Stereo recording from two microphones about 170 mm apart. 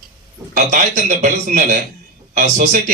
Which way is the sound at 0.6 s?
45° right (ahead or behind).